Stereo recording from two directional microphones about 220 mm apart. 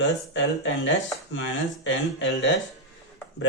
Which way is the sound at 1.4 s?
55° left (ahead or behind).